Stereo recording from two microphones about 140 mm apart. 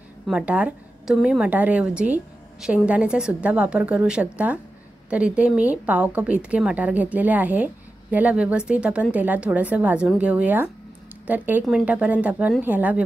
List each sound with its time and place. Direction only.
0.3 s a woman's voice: 10° right (ahead or behind)